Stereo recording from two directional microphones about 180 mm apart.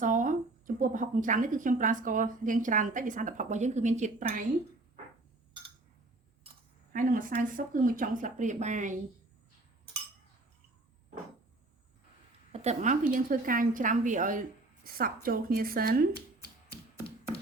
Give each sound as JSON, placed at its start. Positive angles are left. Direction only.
{"t": 0.0, "sound": "a sound", "side_deg": -45}
{"t": 0.8, "sound": "a woman's voice", "side_deg": -50}
{"t": 6.9, "sound": "a woman's voice", "side_deg": -50}
{"t": 12.5, "sound": "a woman's voice", "side_deg": -35}